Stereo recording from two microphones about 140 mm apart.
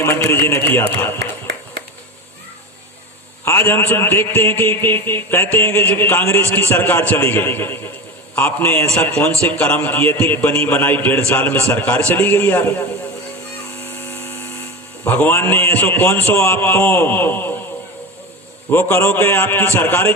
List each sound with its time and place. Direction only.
0.0 s a man's voice: 15° left (ahead or behind)
3.4 s a man's voice: 15° left (ahead or behind)
13.8 s a sound: 15° left (ahead or behind)
15.0 s a man's voice: 15° left (ahead or behind)
18.7 s a man's voice: 15° left (ahead or behind)